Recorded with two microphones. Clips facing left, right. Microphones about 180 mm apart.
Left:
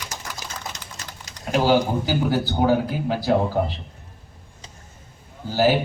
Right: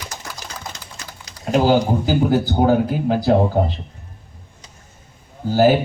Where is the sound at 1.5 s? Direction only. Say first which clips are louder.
Right 3 dB; 50° right (ahead or behind).